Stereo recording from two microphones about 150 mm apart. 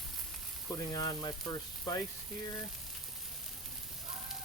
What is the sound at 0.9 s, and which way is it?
Frying, 25° left (ahead or behind).